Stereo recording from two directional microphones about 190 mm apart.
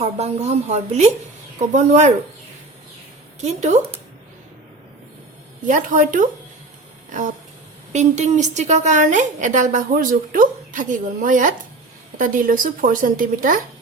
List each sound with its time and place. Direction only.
0.0 s a woman's voice: 35° right (ahead or behind)
3.4 s a woman's voice: 40° right (ahead or behind)
5.6 s a woman's voice: 45° right (ahead or behind)
7.9 s a woman's voice: 40° right (ahead or behind)